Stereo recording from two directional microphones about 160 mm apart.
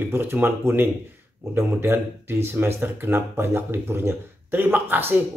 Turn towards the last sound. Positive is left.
turn(degrees=-10)  # may be behind; listen again after turning